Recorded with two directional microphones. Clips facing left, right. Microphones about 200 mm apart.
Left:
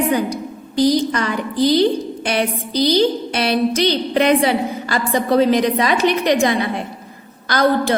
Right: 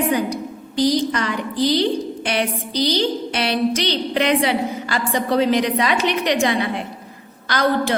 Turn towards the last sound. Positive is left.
turn(degrees=45)  # may be behind; listen again after turning